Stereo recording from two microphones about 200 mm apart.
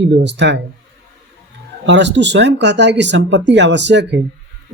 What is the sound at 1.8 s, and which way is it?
Speech, 65° right (ahead or behind).